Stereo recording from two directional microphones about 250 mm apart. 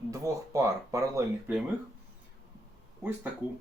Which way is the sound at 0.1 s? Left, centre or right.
Centre.